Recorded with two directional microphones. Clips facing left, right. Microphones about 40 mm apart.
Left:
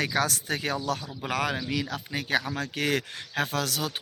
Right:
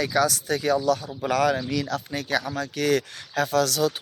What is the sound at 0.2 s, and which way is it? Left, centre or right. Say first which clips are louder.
Speech: right 5 dB; left.